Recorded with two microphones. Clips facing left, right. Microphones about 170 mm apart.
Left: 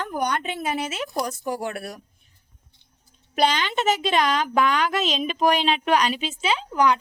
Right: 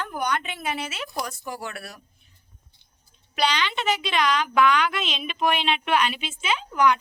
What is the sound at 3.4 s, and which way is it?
A woman's voice, 45° left (ahead or behind).